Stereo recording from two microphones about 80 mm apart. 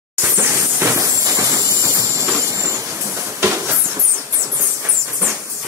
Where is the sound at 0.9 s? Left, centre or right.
Right.